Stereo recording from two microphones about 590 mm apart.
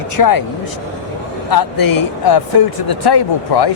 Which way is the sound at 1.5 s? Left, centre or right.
Left.